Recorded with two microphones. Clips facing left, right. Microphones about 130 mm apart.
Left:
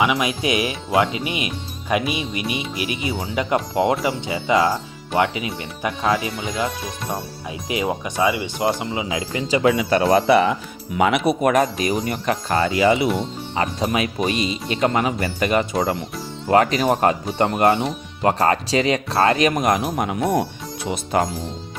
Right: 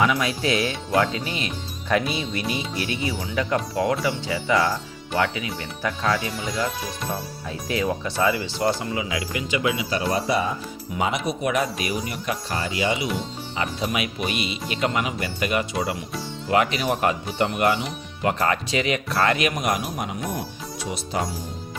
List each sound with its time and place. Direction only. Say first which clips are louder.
0.0 s speech: left 2 dB; 15° left (ahead or behind); by 9.6 s 30° left (ahead or behind)
9.6 s speech: left 9 dB; 55° left (ahead or behind)
12.3 s a man's voice: left 8 dB; 60° left (ahead or behind)
13.5 s a man's voice: left 4 dB; 45° left (ahead or behind)
20.3 s speech: left 9 dB; 60° left (ahead or behind)